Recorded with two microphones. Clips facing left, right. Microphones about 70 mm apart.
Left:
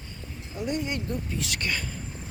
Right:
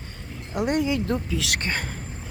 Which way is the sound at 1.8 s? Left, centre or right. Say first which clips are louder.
Right 4 dB; right.